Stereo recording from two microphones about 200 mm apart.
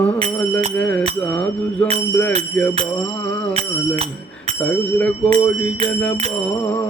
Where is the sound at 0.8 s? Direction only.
5° left (ahead or behind).